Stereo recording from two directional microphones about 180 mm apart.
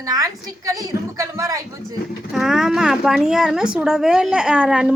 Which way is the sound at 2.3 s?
Centre (ahead or behind).